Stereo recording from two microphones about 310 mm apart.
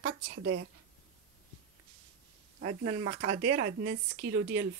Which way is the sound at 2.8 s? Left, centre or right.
Centre.